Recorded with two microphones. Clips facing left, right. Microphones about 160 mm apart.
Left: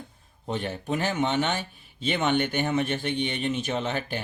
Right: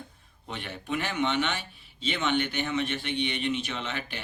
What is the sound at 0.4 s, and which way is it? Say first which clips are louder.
Speech: left 7 dB; 40° left (ahead or behind).